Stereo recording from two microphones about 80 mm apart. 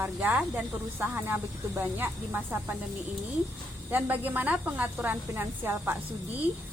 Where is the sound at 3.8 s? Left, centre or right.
Right.